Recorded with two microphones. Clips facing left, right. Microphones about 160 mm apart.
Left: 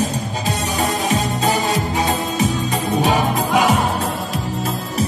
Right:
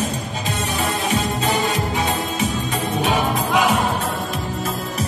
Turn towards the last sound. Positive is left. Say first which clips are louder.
# left 2 dB
turn(degrees=40)  # may be behind; listen again after turning